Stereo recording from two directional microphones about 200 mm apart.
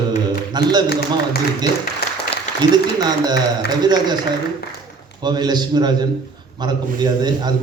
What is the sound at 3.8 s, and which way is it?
Speech, 20° right (ahead or behind).